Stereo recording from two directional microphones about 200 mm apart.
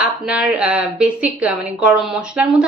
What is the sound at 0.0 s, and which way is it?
Speech, 5° right (ahead or behind).